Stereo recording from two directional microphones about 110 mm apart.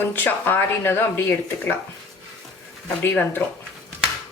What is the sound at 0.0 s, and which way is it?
Speech, 20° left (ahead or behind).